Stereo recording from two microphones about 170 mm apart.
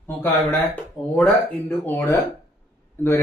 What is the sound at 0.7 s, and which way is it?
Speech, 10° left (ahead or behind).